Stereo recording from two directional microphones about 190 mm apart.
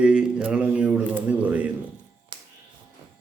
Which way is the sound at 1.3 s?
5° right (ahead or behind).